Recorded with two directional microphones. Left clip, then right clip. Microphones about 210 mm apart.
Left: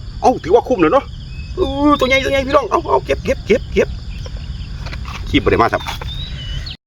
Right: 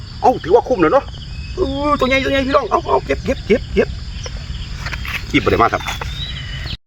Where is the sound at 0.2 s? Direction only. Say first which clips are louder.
Even; 20° left (ahead or behind).